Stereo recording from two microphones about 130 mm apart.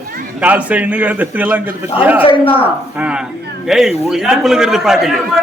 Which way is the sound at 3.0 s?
10° right (ahead or behind).